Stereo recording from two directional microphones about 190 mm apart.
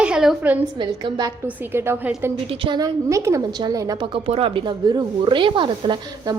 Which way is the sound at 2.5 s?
25° right (ahead or behind).